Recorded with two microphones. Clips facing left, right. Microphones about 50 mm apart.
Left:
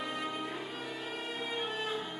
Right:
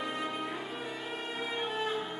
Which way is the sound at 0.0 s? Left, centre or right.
Centre.